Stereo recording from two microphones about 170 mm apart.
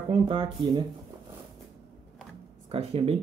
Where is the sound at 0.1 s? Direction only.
30° right (ahead or behind).